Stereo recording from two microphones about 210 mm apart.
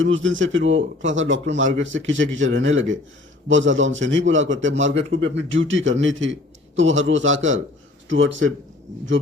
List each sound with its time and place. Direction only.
0.0 s a man's voice: 65° right (ahead or behind)